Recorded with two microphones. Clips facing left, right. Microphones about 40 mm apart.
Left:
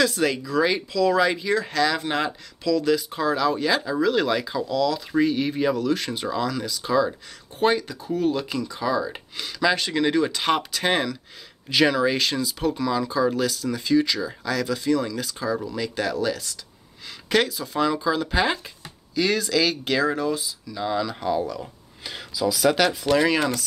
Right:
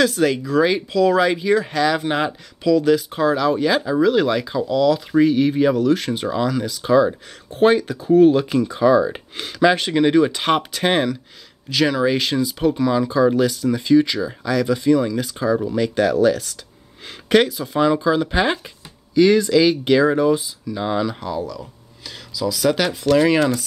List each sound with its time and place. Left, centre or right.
0.1 s speech: centre
0.4 s speech: centre
1.2 s speech: centre
8.1 s speech: right
11.7 s speech: centre
12.0 s speech: centre
15.8 s speech: right
17.3 s speech: centre
21.2 s speech: centre
21.5 s speech: centre